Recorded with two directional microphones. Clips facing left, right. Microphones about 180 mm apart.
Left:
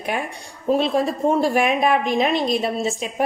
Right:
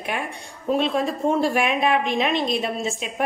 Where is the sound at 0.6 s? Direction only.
40° left (ahead or behind).